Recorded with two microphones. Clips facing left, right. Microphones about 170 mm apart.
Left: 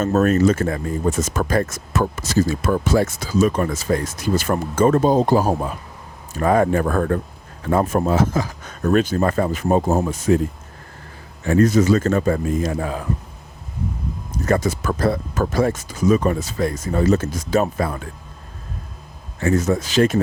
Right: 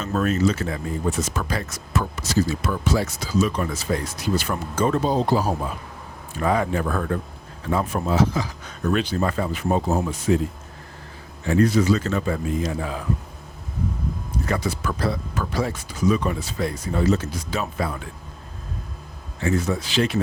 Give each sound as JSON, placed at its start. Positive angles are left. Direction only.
{"t": 0.0, "sound": "speech", "side_deg": 45}
{"t": 11.4, "sound": "speech", "side_deg": 45}
{"t": 14.3, "sound": "speech", "side_deg": 45}
{"t": 19.4, "sound": "speech", "side_deg": 45}